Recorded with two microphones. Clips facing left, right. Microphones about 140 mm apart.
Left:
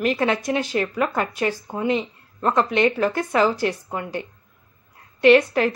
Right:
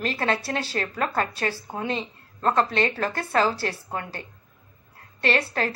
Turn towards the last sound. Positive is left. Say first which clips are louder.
# left 10 dB
turn(degrees=15)  # may be behind; listen again after turning